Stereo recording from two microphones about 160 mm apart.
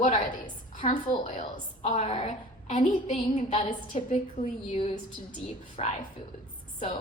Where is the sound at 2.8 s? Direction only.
35° left (ahead or behind).